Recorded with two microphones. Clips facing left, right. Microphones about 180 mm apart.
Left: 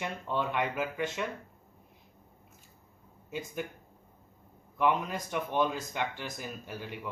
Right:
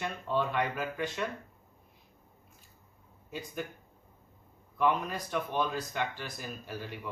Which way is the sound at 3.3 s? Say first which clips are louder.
Left 2 dB; 20° left (ahead or behind).